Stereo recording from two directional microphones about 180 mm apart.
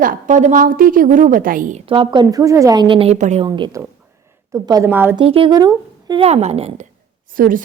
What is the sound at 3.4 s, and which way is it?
A woman's voice, 25° right (ahead or behind).